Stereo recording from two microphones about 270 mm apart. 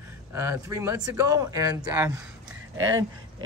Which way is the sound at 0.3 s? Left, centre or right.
Centre.